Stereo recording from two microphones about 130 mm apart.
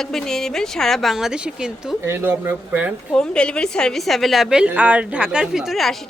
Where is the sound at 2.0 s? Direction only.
20° right (ahead or behind).